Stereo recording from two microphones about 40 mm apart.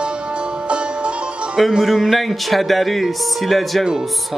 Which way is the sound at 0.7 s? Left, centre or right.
Right.